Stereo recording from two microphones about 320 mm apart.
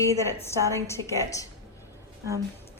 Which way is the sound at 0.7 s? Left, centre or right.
Centre.